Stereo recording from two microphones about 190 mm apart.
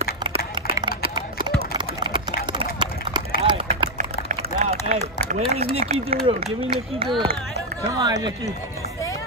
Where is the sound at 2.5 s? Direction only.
25° right (ahead or behind).